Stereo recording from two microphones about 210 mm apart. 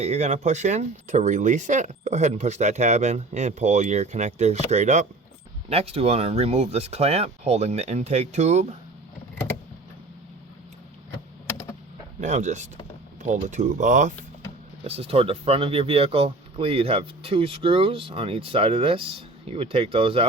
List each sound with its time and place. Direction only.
0.0 s speech: 30° right (ahead or behind)
12.2 s speech: 35° right (ahead or behind)